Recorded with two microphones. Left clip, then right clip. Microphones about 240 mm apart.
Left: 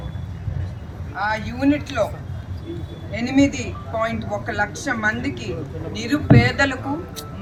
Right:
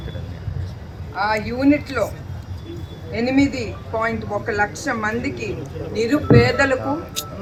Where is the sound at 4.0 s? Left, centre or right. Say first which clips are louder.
Right 1 dB; right.